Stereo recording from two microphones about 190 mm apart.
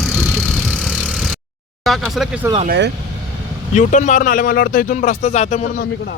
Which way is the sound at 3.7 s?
40° left (ahead or behind).